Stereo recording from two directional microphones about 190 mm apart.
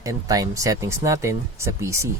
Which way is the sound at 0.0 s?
20° right (ahead or behind).